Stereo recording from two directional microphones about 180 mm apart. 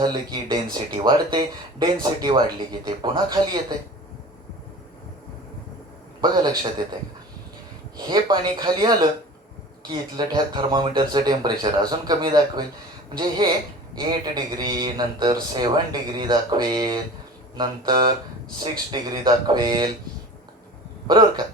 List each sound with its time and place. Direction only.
0.0 s a man's voice: 25° right (ahead or behind)
6.2 s a man's voice: 25° right (ahead or behind)
7.9 s a man's voice: 25° right (ahead or behind)
13.9 s a man's voice: 25° right (ahead or behind)
21.1 s a man's voice: 25° right (ahead or behind)